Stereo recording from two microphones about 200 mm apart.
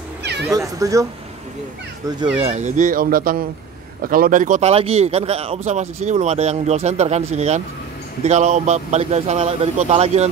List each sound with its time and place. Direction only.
0.2 s cat: 55° right (ahead or behind)
0.5 s speech: 15° right (ahead or behind)
2.3 s a man's voice: 30° right (ahead or behind)